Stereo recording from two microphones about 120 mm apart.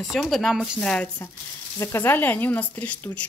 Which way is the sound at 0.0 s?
Centre (ahead or behind).